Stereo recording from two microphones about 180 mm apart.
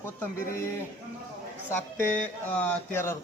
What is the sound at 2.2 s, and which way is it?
Speech, 10° left (ahead or behind).